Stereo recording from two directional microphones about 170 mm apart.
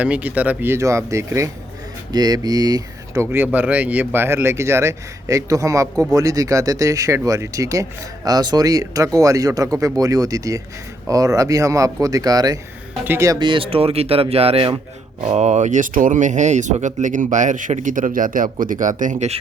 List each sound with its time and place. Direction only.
0.0 s speech: 10° right (ahead or behind); by 19.4 s 45° right (ahead or behind)